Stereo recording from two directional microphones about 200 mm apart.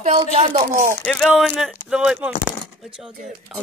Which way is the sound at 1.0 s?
5° left (ahead or behind).